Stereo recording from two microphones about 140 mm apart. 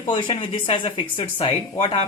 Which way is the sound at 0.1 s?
35° left (ahead or behind).